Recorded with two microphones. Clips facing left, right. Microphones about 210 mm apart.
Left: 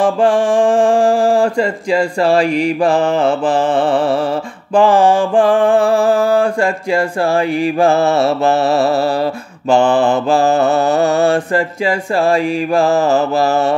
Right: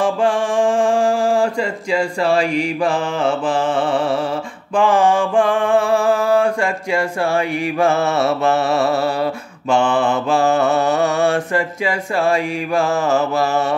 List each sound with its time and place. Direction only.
0.0 s mantra: 35° left (ahead or behind)
2.3 s mantra: 50° left (ahead or behind)
4.7 s mantra: 35° left (ahead or behind)